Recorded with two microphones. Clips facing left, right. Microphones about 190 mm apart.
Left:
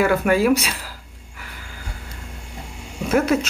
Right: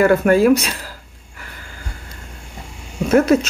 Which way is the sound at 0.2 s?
45° right (ahead or behind).